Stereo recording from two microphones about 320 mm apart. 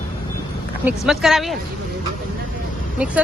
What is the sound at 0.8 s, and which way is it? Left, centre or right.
Speech, centre.